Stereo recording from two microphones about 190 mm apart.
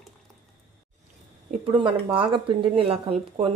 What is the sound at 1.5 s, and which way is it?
Speech, 30° right (ahead or behind).